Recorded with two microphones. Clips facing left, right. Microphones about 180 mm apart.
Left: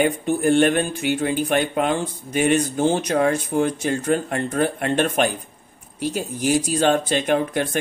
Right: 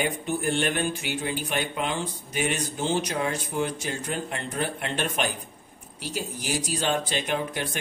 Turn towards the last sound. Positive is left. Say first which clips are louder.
# left 8 dB
turn(degrees=50)  # may be behind; listen again after turning